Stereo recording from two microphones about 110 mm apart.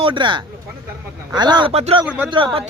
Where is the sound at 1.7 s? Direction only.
75° right (ahead or behind).